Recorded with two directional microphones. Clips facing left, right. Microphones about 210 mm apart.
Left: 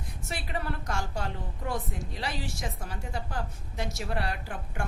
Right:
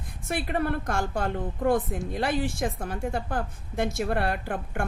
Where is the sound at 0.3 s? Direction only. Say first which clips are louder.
Right 8 dB; 55° right (ahead or behind).